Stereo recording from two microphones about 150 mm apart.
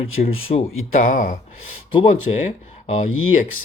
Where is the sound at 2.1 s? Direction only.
40° left (ahead or behind).